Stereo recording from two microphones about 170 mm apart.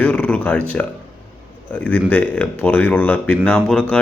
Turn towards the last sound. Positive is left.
turn(degrees=5)  # may be behind; listen again after turning